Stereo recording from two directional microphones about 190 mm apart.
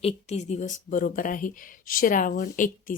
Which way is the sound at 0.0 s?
35° left (ahead or behind).